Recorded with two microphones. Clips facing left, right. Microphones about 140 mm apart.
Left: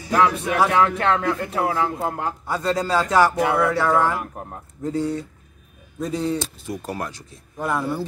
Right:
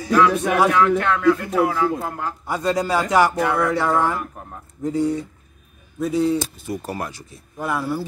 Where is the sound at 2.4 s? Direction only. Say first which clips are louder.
Right 2 dB; 15° right (ahead or behind).